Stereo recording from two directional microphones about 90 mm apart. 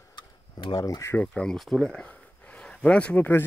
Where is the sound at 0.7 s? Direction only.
50° left (ahead or behind).